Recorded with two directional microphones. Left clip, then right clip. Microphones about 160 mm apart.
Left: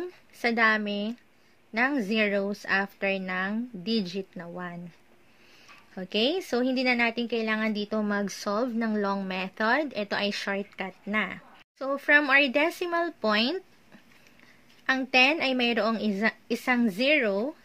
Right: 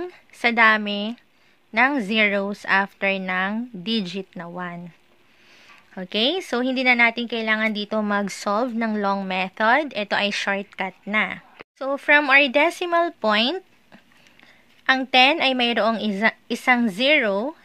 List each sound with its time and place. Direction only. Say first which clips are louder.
0.0 s a woman's voice: right 7 dB; 30° right (ahead or behind)
5.9 s a woman's voice: right 4 dB; 30° right (ahead or behind)
14.9 s a woman's voice: right 6 dB; 30° right (ahead or behind)